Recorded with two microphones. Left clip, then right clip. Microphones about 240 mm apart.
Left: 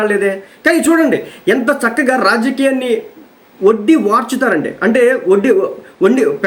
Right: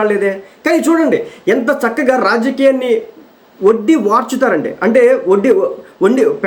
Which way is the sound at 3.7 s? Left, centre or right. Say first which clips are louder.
Even; centre.